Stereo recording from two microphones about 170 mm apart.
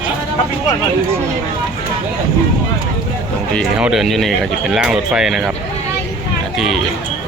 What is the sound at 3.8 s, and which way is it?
Speech, 5° right (ahead or behind).